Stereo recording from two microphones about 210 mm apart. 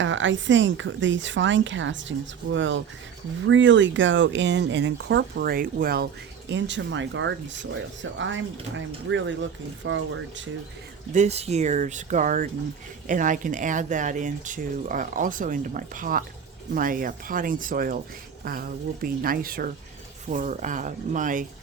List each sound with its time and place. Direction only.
0.0 s a woman's voice: 60° right (ahead or behind); by 6.1 s 45° right (ahead or behind)
6.5 s a woman's voice: 60° right (ahead or behind)
11.1 s speech: 30° right (ahead or behind)
19.0 s speech: 45° right (ahead or behind)